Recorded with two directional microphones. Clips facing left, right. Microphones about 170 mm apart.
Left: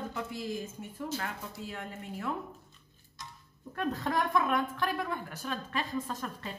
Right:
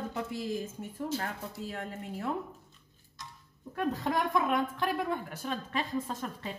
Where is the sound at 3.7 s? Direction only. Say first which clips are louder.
Right 1 dB; 10° right (ahead or behind).